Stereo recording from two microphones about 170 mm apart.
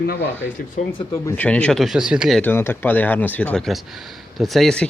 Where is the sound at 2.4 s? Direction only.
10° left (ahead or behind).